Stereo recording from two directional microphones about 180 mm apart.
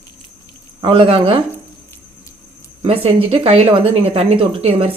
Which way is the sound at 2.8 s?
30° right (ahead or behind).